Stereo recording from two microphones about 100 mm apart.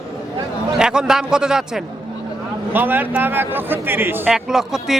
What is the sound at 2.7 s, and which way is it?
A man's voice, 20° right (ahead or behind).